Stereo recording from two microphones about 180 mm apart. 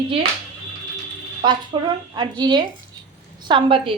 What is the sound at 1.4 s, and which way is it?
A woman's voice, 25° right (ahead or behind).